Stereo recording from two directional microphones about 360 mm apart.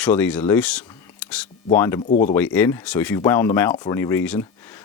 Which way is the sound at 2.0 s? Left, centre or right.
Left.